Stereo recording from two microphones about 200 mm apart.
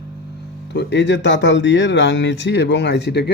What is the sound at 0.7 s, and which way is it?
Speech, 60° left (ahead or behind).